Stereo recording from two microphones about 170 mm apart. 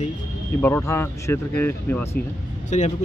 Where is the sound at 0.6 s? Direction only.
10° left (ahead or behind).